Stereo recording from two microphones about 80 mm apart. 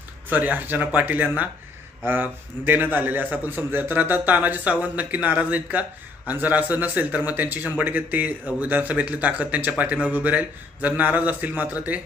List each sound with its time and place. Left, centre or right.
0.3 s speech: right